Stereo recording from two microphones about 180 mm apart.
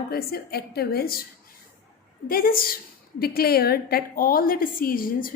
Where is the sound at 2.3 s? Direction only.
55° left (ahead or behind).